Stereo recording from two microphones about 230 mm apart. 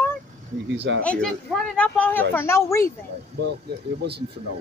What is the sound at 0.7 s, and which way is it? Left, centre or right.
Speech, right.